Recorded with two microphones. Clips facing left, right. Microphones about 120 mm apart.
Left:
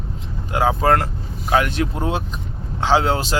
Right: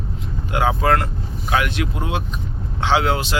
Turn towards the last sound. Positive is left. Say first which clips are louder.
# left 1 dB
turn(degrees=35)  # may be behind; listen again after turning